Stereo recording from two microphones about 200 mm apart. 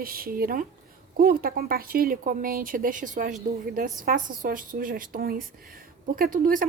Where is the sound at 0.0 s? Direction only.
45° right (ahead or behind).